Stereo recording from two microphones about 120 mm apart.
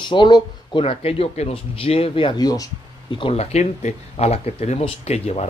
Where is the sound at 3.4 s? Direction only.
70° left (ahead or behind).